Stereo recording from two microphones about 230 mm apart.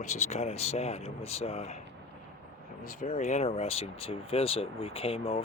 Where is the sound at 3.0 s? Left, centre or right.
Left.